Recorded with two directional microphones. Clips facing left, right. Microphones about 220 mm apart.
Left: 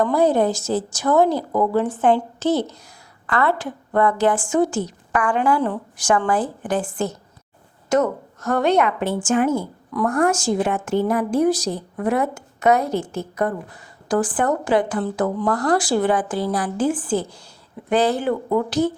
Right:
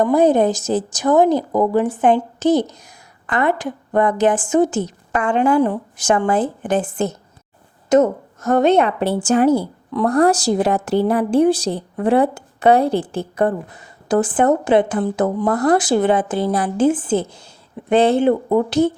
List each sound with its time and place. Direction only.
0.0 s a woman's voice: 20° right (ahead or behind)